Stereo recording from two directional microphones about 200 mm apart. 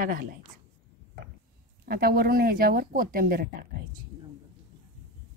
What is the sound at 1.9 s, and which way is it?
Speech, 50° right (ahead or behind).